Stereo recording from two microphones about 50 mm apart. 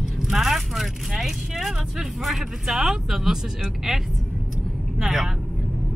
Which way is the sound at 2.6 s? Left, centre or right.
Centre.